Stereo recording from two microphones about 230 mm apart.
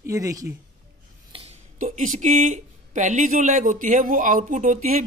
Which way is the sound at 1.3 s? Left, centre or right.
Right.